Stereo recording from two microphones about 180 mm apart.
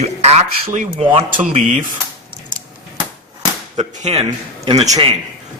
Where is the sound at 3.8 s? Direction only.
35° right (ahead or behind).